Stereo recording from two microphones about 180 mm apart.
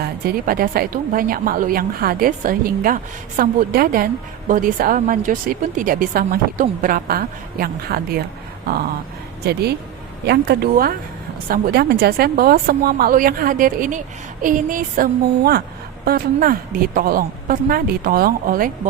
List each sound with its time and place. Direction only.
0.0 s a woman's voice: 55° right (ahead or behind)
9.4 s a woman's voice: 65° right (ahead or behind)